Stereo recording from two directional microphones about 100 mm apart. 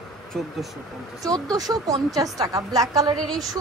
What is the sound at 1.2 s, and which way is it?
A woman's voice, 35° right (ahead or behind).